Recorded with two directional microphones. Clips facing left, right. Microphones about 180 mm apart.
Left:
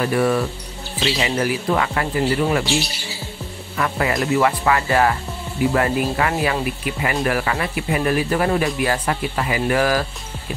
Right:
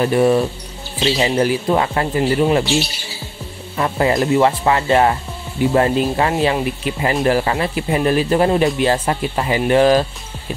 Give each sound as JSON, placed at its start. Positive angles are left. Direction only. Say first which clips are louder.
{"t": 0.0, "sound": "speech", "louder": "right 4 dB", "side_deg": -25}
{"t": 3.7, "sound": "speech", "louder": "right 4 dB", "side_deg": -25}